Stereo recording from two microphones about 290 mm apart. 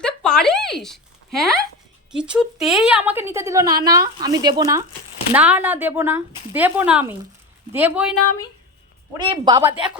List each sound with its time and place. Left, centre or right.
0.0 s a sound: centre
2.1 s speech: centre
9.1 s speech: centre